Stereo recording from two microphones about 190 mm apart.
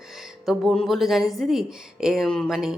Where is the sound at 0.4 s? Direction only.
Centre (ahead or behind).